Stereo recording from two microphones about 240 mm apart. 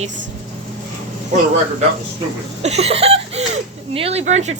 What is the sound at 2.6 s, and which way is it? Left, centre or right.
Speech, right.